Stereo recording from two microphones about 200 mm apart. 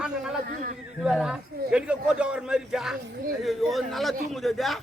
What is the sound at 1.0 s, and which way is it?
Speech, 5° right (ahead or behind).